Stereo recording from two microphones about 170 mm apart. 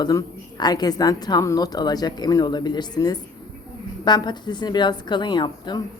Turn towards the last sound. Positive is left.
turn(degrees=25)  # may be behind; listen again after turning